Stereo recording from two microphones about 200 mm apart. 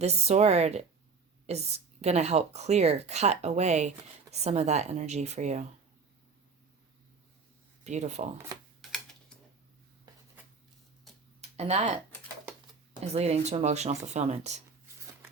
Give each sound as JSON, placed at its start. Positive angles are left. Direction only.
{"t": 0.0, "sound": "a woman's voice", "side_deg": -35}
{"t": 7.9, "sound": "a woman's voice", "side_deg": -35}
{"t": 8.8, "sound": "typing", "side_deg": 0}
{"t": 11.3, "sound": "a sound", "side_deg": -30}
{"t": 13.0, "sound": "a woman's voice", "side_deg": -30}